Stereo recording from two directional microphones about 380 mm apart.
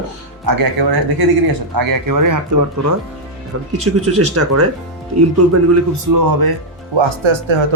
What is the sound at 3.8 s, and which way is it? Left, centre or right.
Speech, right.